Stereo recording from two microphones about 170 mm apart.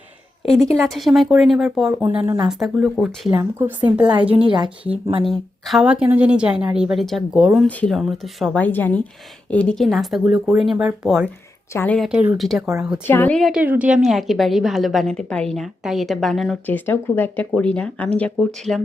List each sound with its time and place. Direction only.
0.4 s a woman's voice: centre (ahead or behind); by 2.4 s 15° right (ahead or behind)
2.5 s a woman's voice: centre (ahead or behind)
3.2 s a woman's voice: 10° right (ahead or behind)
4.4 s speech: 30° right (ahead or behind)
5.2 s a woman's voice: centre (ahead or behind)
11.7 s speech: 15° left (ahead or behind)
11.9 s a woman's voice: 5° right (ahead or behind)
13.1 s a woman's voice: 10° left (ahead or behind)
16.6 s speech: 10° left (ahead or behind)